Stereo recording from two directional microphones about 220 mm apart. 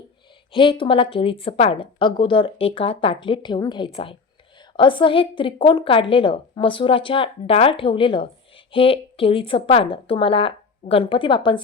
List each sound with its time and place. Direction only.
0.5 s a woman's voice: 25° left (ahead or behind)